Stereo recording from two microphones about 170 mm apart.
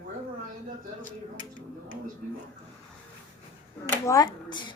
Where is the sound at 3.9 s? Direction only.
20° left (ahead or behind).